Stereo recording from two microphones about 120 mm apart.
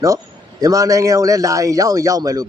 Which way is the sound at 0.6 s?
25° right (ahead or behind).